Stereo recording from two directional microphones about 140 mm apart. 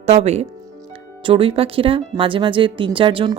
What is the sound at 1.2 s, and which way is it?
Speech, 40° right (ahead or behind).